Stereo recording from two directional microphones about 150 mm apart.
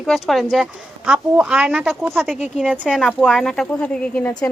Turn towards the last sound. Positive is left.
turn(degrees=10)  # may be behind; listen again after turning